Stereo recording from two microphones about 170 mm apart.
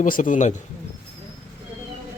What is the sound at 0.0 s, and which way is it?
Speech, 50° left (ahead or behind).